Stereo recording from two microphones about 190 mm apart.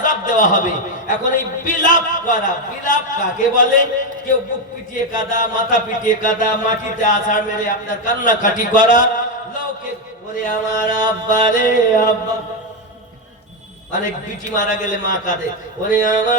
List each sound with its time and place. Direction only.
0.0 s chant: 40° left (ahead or behind)
5.3 s chant: 45° left (ahead or behind)
10.3 s chant: 40° left (ahead or behind)
14.5 s a man's voice: 40° left (ahead or behind)
15.9 s chant: 40° left (ahead or behind)